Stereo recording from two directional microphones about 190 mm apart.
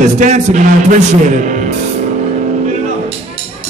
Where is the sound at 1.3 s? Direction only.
40° right (ahead or behind).